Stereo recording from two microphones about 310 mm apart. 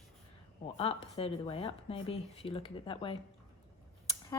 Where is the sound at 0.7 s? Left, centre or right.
Centre.